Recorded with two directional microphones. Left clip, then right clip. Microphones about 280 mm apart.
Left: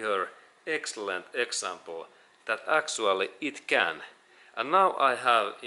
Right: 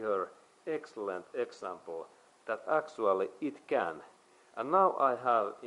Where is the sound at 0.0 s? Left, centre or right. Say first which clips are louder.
Left 4 dB; centre.